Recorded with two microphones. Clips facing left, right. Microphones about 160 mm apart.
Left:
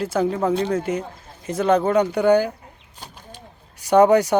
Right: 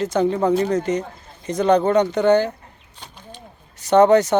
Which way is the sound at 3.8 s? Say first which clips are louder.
Right 1 dB; 10° left (ahead or behind).